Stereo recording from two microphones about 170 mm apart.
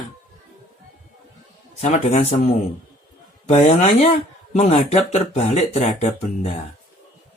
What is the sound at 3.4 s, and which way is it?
Speech, 40° left (ahead or behind).